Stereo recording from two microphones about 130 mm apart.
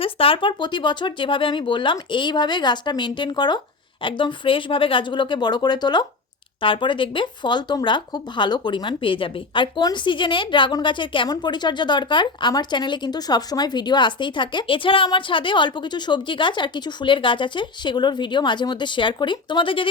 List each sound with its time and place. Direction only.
0.0 s speech: 45° left (ahead or behind)